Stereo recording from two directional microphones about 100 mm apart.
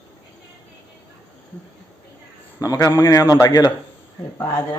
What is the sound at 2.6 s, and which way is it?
A man's voice, 35° left (ahead or behind).